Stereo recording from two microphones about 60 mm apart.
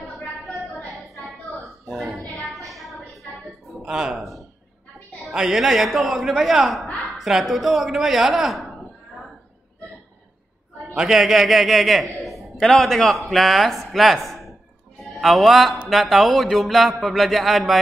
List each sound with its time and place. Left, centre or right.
0.9 s a sound: centre
3.8 s a man's voice: centre
11.0 s a man's voice: centre